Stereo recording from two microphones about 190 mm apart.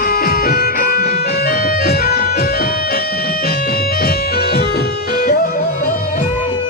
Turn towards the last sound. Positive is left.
turn(degrees=50)  # may be behind; listen again after turning